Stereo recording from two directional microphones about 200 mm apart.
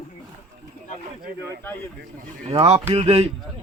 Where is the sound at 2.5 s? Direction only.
30° right (ahead or behind).